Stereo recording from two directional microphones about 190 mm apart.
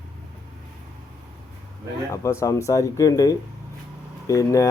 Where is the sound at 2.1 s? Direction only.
15° left (ahead or behind).